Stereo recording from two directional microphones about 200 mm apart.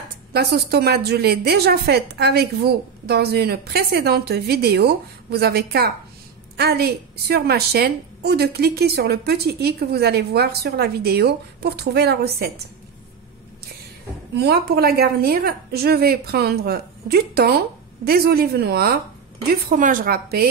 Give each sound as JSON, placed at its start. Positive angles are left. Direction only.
{"t": 0.3, "sound": "a woman's voice", "side_deg": -55}
{"t": 14.3, "sound": "a woman's voice", "side_deg": -55}